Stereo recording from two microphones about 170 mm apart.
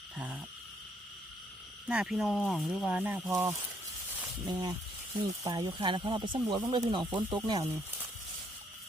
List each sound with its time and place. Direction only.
1.9 s speech: 5° right (ahead or behind); by 7.7 s 25° right (ahead or behind)